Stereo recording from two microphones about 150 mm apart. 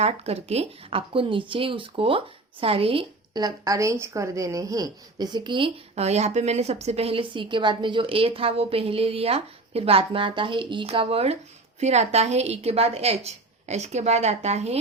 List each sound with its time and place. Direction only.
0.0 s speech: 45° right (ahead or behind)
5.9 s a woman's voice: 45° right (ahead or behind)